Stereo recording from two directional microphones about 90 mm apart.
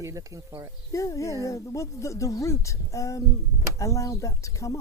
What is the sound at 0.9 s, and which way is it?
Speech, 35° left (ahead or behind).